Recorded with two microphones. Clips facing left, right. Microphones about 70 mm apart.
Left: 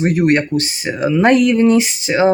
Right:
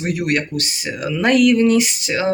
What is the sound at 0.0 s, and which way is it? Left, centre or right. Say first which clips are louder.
Speech: left 6 dB; left.